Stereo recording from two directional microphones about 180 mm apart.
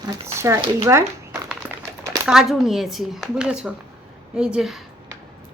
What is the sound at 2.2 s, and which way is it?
Speech, 5° right (ahead or behind).